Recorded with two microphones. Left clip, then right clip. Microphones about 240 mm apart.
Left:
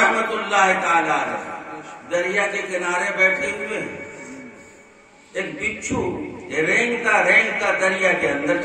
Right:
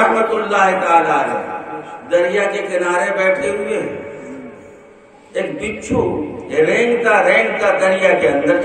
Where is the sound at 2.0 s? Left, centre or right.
Centre.